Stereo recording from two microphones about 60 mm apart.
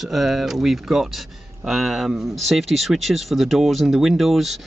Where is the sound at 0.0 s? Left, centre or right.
Centre.